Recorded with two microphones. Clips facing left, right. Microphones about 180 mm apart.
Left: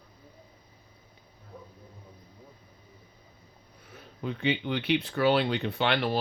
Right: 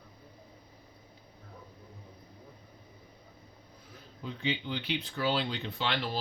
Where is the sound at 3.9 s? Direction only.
65° left (ahead or behind).